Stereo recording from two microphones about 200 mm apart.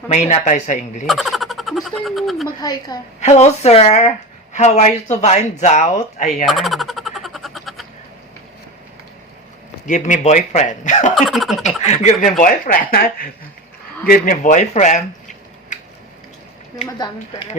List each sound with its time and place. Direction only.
0.1 s speech: 35° left (ahead or behind)
1.0 s speech: centre (ahead or behind)
2.6 s a woman's voice: 20° left (ahead or behind)
3.2 s speech: 35° left (ahead or behind)
6.3 s a sound: centre (ahead or behind)
9.8 s speech: 40° left (ahead or behind)
11.1 s speech: centre (ahead or behind)
11.9 s speech: 35° left (ahead or behind)
15.7 s a sound: 40° left (ahead or behind)
16.7 s a woman's voice: 25° left (ahead or behind)